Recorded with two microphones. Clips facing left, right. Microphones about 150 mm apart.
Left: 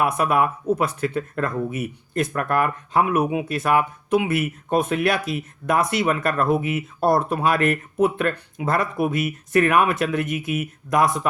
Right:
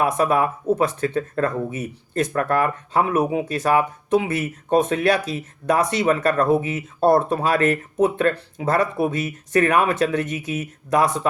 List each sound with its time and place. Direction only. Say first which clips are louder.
0.0 s speech: right 1 dB; 30° right (ahead or behind)